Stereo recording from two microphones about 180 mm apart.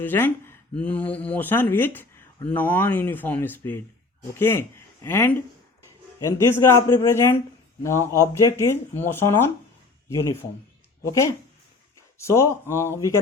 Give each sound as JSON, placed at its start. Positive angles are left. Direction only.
{"t": 0.0, "sound": "speech", "side_deg": 10}
{"t": 11.0, "sound": "speech", "side_deg": 15}